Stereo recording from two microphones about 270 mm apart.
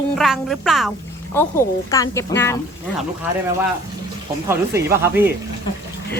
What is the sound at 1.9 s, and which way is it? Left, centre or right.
Speech, centre.